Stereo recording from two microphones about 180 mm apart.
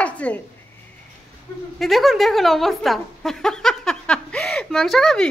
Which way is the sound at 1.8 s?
Centre (ahead or behind).